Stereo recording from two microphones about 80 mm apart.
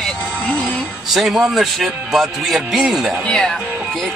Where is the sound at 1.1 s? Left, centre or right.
Centre.